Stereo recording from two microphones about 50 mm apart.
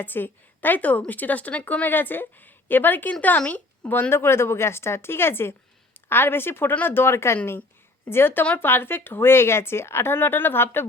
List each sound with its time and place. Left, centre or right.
0.0 s a woman's voice: left
4.1 s a woman's voice: left